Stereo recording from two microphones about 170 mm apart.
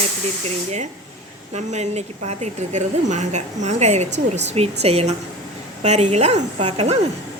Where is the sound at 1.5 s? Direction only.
40° right (ahead or behind).